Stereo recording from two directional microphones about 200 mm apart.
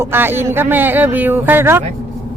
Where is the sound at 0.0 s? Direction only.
10° right (ahead or behind).